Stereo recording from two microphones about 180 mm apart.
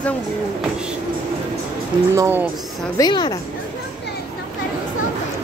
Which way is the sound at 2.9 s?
25° left (ahead or behind).